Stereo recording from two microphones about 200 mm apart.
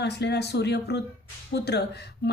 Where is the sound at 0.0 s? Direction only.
60° left (ahead or behind).